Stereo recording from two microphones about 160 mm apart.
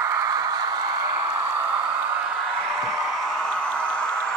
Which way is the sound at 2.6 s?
5° right (ahead or behind).